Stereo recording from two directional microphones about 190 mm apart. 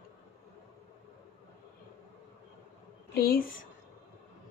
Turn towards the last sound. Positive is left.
turn(degrees=50)  # may be behind; listen again after turning